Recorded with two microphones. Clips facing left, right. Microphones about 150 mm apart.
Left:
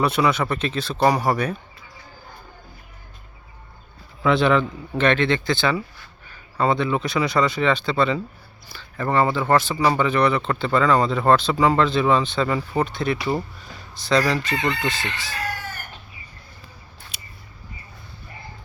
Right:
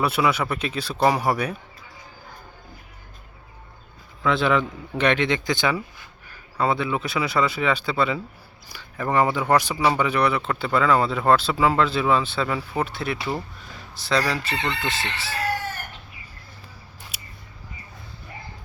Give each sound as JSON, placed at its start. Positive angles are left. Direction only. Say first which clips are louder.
{"t": 0.0, "sound": "speech", "louder": "left 2 dB", "side_deg": -5}
{"t": 4.2, "sound": "speech", "louder": "left 3 dB", "side_deg": 0}
{"t": 14.5, "sound": "chicken", "louder": "left 4 dB", "side_deg": 10}
{"t": 17.1, "sound": "scissors", "louder": "even", "side_deg": -10}